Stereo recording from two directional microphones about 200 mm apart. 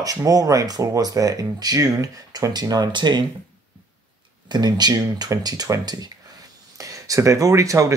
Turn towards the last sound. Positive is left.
turn(degrees=-15)  # may be behind; listen again after turning